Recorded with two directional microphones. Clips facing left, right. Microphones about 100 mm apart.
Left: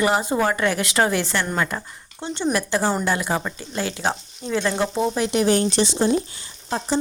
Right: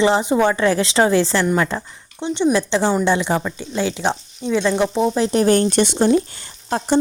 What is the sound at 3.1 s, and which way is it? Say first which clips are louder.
Speech: right 4 dB; 20° right (ahead or behind).